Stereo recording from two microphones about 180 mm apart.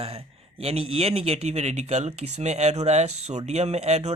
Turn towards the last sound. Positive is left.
turn(degrees=-35)  # may be behind; listen again after turning